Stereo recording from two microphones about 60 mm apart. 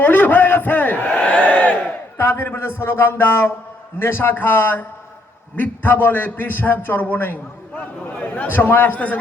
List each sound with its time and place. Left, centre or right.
0.0 s crowd: left
2.1 s a man's voice: left